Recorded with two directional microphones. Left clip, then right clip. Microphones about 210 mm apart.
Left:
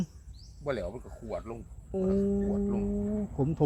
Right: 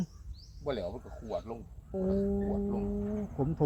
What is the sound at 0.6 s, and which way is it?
Speech, 35° left (ahead or behind).